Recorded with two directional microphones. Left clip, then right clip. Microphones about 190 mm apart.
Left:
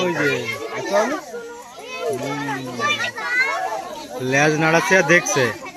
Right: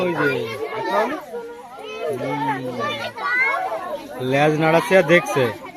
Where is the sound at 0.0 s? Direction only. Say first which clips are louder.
Even; centre (ahead or behind).